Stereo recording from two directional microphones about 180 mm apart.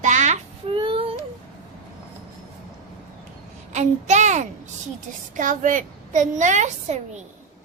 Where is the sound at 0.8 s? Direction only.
30° right (ahead or behind).